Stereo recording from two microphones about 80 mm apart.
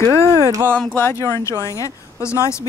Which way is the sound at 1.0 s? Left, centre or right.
Left.